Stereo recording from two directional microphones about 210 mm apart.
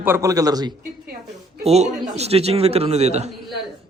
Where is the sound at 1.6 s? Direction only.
30° right (ahead or behind).